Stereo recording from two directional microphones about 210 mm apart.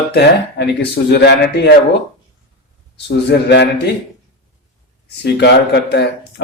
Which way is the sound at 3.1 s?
55° left (ahead or behind).